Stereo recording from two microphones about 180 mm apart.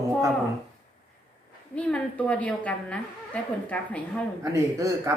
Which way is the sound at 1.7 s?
5° left (ahead or behind).